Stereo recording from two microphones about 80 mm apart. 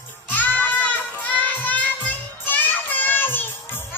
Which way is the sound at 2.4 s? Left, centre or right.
Left.